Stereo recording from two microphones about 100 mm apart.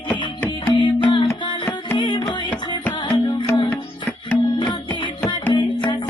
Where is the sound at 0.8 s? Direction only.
50° left (ahead or behind).